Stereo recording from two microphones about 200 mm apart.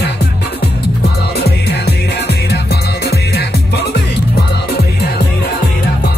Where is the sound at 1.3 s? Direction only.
55° left (ahead or behind).